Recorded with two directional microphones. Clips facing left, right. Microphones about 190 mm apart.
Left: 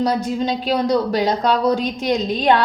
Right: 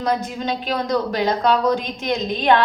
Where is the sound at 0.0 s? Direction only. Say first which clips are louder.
Left 3 dB; 35° left (ahead or behind).